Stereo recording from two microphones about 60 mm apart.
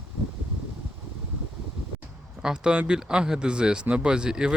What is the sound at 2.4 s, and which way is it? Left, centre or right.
Speech, centre.